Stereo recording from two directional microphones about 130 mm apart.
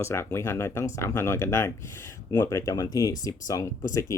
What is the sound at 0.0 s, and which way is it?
Speech, 20° left (ahead or behind).